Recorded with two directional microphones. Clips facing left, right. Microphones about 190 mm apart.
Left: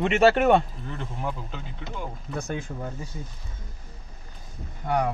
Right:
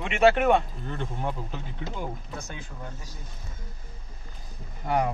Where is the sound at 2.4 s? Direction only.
55° left (ahead or behind).